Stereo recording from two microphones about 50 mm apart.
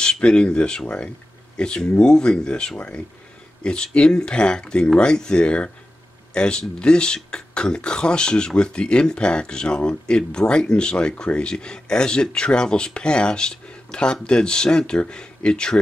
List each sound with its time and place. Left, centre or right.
0.0 s speech: centre